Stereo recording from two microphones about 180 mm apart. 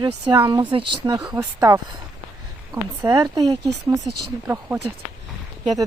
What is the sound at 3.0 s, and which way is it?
Speech, 25° right (ahead or behind).